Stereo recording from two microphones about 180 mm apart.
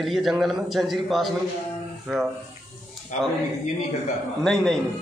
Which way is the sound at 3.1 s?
40° left (ahead or behind).